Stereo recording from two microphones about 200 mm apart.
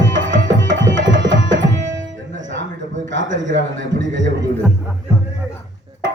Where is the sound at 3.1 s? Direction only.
65° right (ahead or behind).